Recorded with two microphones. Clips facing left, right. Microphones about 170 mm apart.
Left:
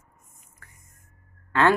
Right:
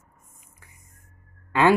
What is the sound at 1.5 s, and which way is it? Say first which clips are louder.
Speech: right 2 dB; 10° right (ahead or behind).